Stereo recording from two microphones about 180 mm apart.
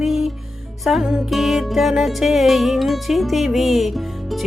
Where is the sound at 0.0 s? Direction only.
Centre (ahead or behind).